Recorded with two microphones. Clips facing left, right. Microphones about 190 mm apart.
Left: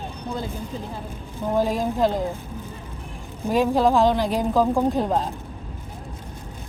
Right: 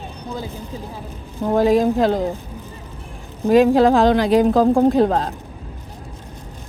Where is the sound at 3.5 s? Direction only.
85° right.